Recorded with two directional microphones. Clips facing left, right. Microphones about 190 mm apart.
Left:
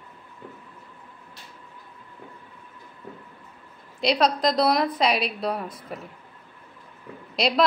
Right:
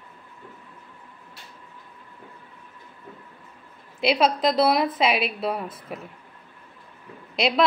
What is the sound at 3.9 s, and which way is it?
A woman's voice, 5° right (ahead or behind).